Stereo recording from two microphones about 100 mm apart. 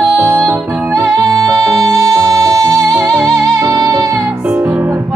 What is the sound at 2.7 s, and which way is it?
Music, 25° right (ahead or behind).